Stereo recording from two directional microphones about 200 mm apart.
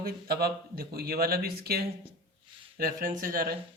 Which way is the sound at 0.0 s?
50° right (ahead or behind).